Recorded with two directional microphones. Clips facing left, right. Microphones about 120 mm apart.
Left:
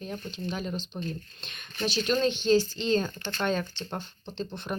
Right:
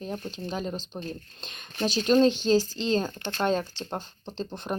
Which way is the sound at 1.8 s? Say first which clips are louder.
Right 5 dB; 35° right (ahead or behind).